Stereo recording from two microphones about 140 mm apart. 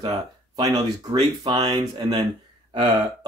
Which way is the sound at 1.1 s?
35° right (ahead or behind).